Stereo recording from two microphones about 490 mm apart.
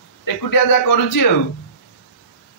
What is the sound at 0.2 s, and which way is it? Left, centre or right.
A man's voice, left.